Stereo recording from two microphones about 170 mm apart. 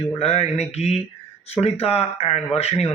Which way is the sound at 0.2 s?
40° left (ahead or behind).